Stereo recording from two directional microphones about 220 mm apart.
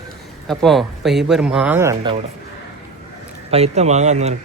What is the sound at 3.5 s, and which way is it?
Speech, 30° right (ahead or behind).